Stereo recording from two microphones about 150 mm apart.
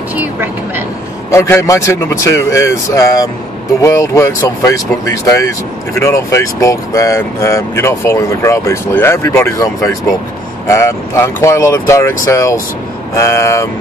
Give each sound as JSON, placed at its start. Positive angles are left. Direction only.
{"t": 0.1, "sound": "speech", "side_deg": -15}
{"t": 1.3, "sound": "speech", "side_deg": 20}
{"t": 5.9, "sound": "speech", "side_deg": 20}